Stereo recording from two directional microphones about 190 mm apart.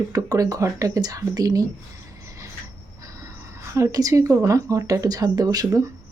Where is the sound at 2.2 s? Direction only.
15° right (ahead or behind).